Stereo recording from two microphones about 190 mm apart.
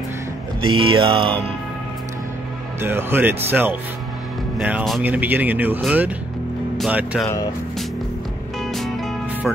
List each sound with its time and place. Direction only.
0.7 s music: 25° right (ahead or behind)
2.8 s speech: 10° right (ahead or behind)
8.7 s music: centre (ahead or behind)